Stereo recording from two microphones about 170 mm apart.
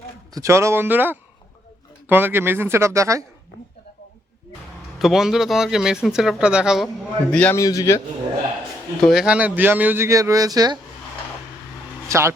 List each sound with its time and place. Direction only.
0.3 s speech: 15° right (ahead or behind)
4.9 s speech: centre (ahead or behind)
7.6 s a man's voice: 20° left (ahead or behind)
9.0 s speech: 5° right (ahead or behind); by 10.8 s 20° right (ahead or behind)
12.0 s speech: 15° right (ahead or behind)